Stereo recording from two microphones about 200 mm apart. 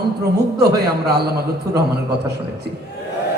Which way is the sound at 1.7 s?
15° right (ahead or behind).